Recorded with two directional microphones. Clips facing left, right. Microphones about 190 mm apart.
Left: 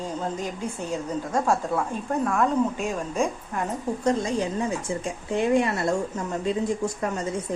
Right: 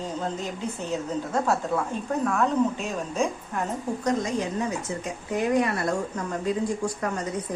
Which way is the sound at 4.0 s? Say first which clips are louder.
Left 2 dB; 30° left (ahead or behind).